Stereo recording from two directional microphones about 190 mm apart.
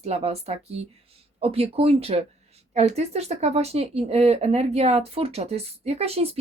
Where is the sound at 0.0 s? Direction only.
35° right (ahead or behind).